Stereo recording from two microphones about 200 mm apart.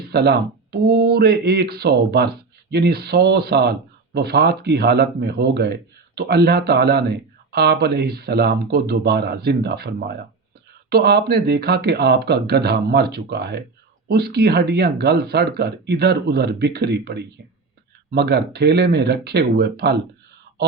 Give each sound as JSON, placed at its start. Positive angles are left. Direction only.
{"t": 0.0, "sound": "speech", "side_deg": -55}